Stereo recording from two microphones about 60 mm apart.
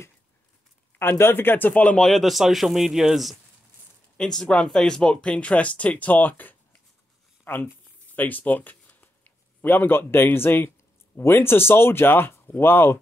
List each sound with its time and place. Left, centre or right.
0.9 s speech: left
2.0 s speech: centre
4.2 s speech: centre; by 7.6 s left
8.1 s a sound: left
9.6 s speech: left